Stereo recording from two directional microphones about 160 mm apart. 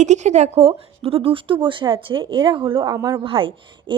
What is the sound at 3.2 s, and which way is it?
Speech, 35° right (ahead or behind).